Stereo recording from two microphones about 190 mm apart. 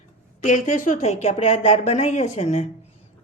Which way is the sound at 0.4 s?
40° left (ahead or behind).